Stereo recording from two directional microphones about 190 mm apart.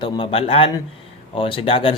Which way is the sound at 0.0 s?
25° left (ahead or behind).